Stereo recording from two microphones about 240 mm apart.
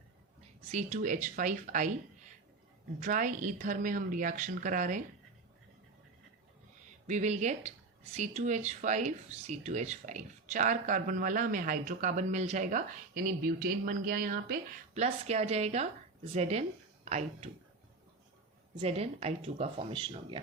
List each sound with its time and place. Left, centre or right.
0.7 s speech: right
3.0 s speech: right
7.1 s a woman's voice: right
15.0 s a woman's voice: right
18.8 s a woman's voice: right